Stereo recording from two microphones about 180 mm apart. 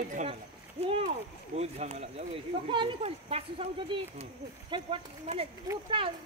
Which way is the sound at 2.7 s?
25° right (ahead or behind).